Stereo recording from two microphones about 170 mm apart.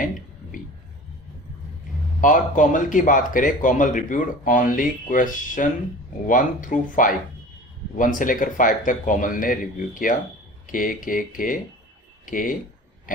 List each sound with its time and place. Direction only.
2.2 s speech: 50° left (ahead or behind)
13.1 s oink: 50° left (ahead or behind)